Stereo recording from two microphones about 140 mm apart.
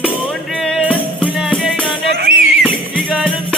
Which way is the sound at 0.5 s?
Centre (ahead or behind).